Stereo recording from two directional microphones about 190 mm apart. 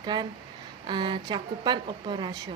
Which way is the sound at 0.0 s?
25° right (ahead or behind).